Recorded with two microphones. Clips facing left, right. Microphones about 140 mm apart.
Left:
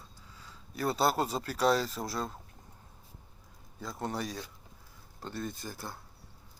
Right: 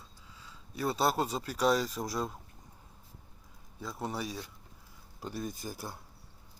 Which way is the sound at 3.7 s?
5° right (ahead or behind).